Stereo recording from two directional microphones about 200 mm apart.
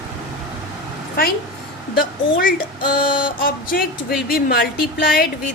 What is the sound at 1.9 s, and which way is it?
Speech, 45° left (ahead or behind).